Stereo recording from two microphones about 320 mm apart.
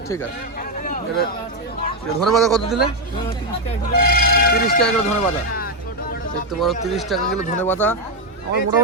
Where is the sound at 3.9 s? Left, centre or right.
Left.